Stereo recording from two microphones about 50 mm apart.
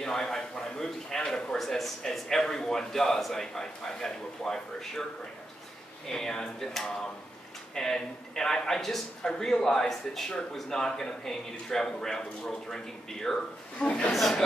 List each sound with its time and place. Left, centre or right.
0.0 s speech: centre
1.6 s a man's voice: centre
6.0 s a man's voice: centre
7.7 s a man's voice: centre
13.7 s speech: left
14.1 s speech: centre